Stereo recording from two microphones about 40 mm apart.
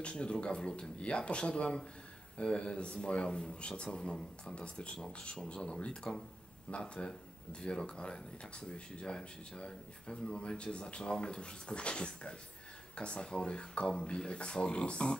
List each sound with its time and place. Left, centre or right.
0.0 s speech: left